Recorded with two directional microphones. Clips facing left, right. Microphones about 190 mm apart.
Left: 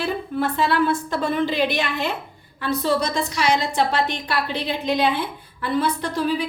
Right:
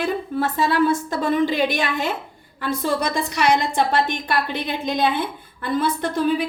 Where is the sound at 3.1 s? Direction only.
55° right (ahead or behind).